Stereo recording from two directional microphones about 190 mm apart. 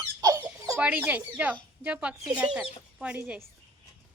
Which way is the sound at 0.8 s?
10° right (ahead or behind).